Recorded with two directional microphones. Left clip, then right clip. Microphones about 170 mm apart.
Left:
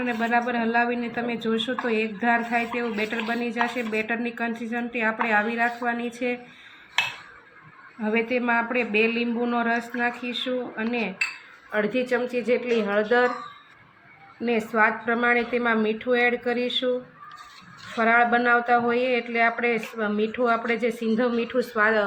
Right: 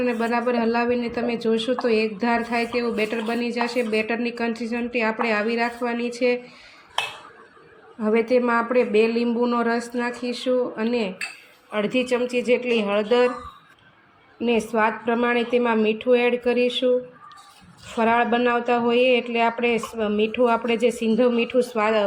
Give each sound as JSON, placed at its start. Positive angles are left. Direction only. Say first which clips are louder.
{"t": 0.0, "sound": "a woman's voice", "louder": "right 1 dB", "side_deg": -15}
{"t": 8.0, "sound": "a woman's voice", "louder": "right 4 dB", "side_deg": -15}
{"t": 9.4, "sound": "a woman's voice", "louder": "right 1 dB", "side_deg": -10}
{"t": 12.4, "sound": "speech", "louder": "right 4 dB", "side_deg": 30}
{"t": 12.6, "sound": "a woman's voice", "louder": "right 1 dB", "side_deg": -20}
{"t": 14.4, "sound": "a woman's voice", "louder": "right 1 dB", "side_deg": -15}
{"t": 17.9, "sound": "a woman's voice", "louder": "even", "side_deg": -15}
{"t": 18.9, "sound": "a woman's voice", "louder": "right 5 dB", "side_deg": 20}
{"t": 19.3, "sound": "a woman's voice", "louder": "right 1 dB", "side_deg": -15}
{"t": 20.1, "sound": "a woman's voice", "louder": "right 6 dB", "side_deg": 20}
{"t": 20.4, "sound": "a woman's voice", "louder": "right 3 dB", "side_deg": -15}